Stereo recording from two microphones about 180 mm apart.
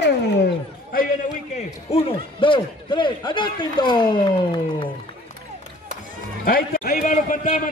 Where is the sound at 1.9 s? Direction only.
30° left (ahead or behind).